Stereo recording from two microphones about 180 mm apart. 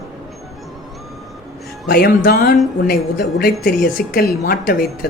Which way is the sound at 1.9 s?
60° left (ahead or behind).